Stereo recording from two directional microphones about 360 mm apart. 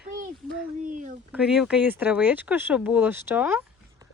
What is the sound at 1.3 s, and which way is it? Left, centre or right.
Speech, centre.